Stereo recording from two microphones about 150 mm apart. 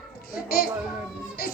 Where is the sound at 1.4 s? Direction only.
90° left.